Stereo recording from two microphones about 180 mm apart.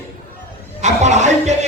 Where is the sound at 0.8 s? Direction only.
40° right (ahead or behind).